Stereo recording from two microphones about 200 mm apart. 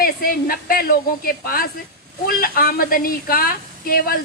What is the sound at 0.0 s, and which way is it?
A woman's voice, 45° left (ahead or behind).